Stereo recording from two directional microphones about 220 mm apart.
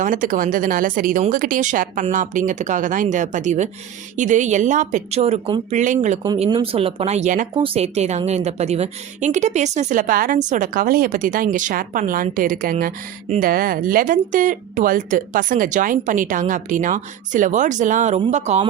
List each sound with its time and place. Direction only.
0.0 s a woman's voice: 35° right (ahead or behind)
6.2 s a woman's voice: 20° right (ahead or behind)